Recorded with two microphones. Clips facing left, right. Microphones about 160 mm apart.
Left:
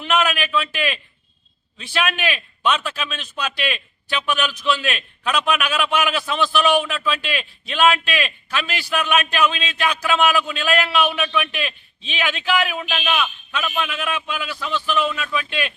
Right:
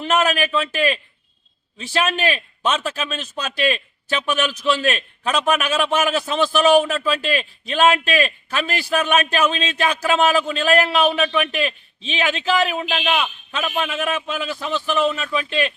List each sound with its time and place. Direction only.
0.0 s a man's voice: 40° right (ahead or behind)